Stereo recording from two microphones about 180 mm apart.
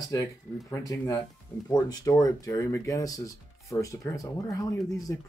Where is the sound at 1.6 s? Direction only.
20° left (ahead or behind).